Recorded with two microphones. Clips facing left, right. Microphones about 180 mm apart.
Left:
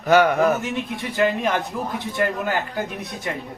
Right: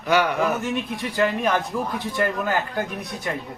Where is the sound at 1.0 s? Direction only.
20° left (ahead or behind).